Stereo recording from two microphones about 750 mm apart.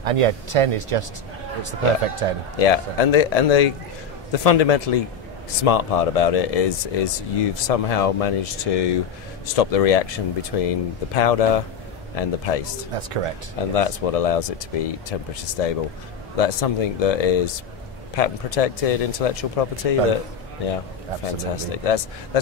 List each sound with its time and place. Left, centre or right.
0.0 s speech: right
2.6 s speech: left
12.9 s speech: right
13.6 s speech: left
21.4 s speech: left